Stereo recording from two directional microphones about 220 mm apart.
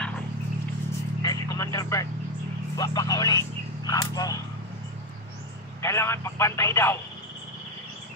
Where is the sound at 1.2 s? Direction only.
15° left (ahead or behind).